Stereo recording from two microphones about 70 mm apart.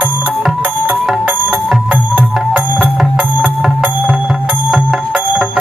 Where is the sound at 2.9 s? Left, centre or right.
Centre.